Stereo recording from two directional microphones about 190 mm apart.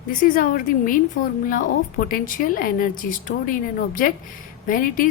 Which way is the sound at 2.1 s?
45° left (ahead or behind).